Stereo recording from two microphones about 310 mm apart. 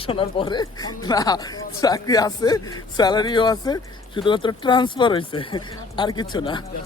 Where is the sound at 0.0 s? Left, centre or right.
Centre.